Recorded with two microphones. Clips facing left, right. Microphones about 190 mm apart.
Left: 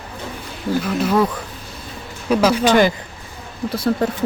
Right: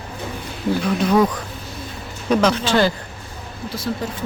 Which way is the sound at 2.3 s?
5° left (ahead or behind).